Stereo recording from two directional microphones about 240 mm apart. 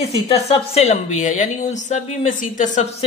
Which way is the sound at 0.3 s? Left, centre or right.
Left.